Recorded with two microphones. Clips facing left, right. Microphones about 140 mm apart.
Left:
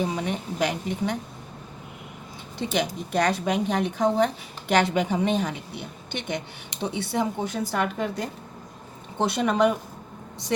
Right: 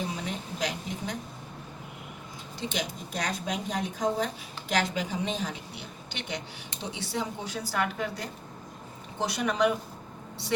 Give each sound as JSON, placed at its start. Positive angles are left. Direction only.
{"t": 0.0, "sound": "a woman's voice", "side_deg": 65}
{"t": 2.7, "sound": "a woman's voice", "side_deg": 65}